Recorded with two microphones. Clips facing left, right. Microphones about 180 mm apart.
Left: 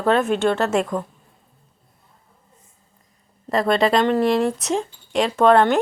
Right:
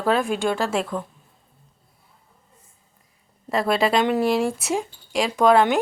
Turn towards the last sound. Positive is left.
turn(degrees=-5)  # may be behind; listen again after turning